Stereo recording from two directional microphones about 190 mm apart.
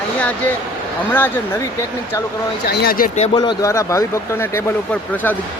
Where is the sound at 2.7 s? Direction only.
55° left (ahead or behind).